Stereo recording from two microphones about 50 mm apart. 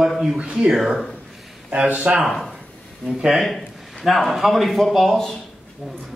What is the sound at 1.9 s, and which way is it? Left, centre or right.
Speech, right.